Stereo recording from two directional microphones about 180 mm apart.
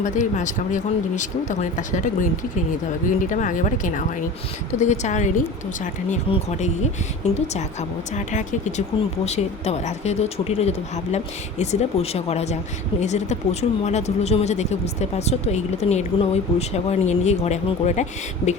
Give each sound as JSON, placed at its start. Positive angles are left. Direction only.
{"t": 0.0, "sound": "speech", "side_deg": 45}